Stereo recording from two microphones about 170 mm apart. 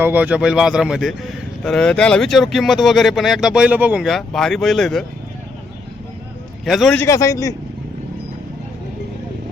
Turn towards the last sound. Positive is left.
turn(degrees=20)  # may be behind; listen again after turning